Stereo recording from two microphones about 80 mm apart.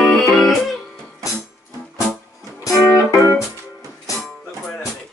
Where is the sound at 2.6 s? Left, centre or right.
Left.